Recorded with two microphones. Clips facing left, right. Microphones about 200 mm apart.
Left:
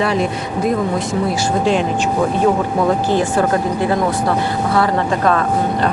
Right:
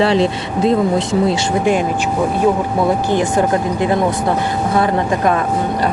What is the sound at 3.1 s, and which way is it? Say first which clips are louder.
Speech: right 1 dB; 15° right (ahead or behind).